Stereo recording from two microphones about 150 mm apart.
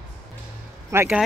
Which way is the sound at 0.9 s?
20° right (ahead or behind).